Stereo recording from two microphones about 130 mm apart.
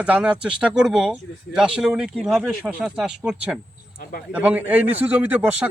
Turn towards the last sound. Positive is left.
turn(degrees=-10)  # may be behind; listen again after turning